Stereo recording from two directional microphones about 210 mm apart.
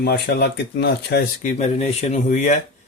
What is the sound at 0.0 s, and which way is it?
Speech, 50° left (ahead or behind).